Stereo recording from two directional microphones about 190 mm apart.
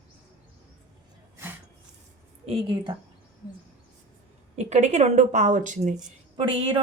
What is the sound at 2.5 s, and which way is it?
Speech, 25° right (ahead or behind).